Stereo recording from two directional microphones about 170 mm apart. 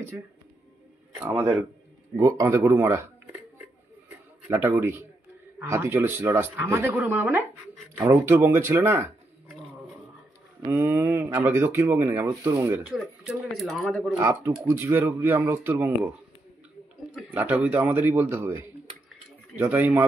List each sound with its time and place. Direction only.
1.2 s speech: 15° right (ahead or behind)
4.5 s speech: 15° right (ahead or behind)
10.7 s speech: 15° right (ahead or behind); by 14.1 s 5° left (ahead or behind)
14.1 s speech: 15° right (ahead or behind)
17.1 s speech: 10° right (ahead or behind)